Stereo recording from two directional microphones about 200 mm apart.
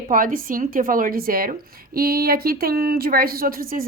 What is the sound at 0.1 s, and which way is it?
Speech, 45° right (ahead or behind).